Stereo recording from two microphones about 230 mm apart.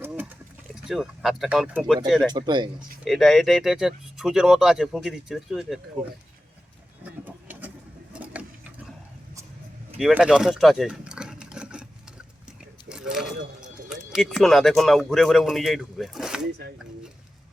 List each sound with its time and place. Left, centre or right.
0.0 s a sound: centre
0.9 s speech: centre
2.3 s speech: centre
3.0 s speech: centre
7.0 s vehicle: centre
8.1 s sewing machine: centre
10.0 s a sound: centre
12.9 s speech: centre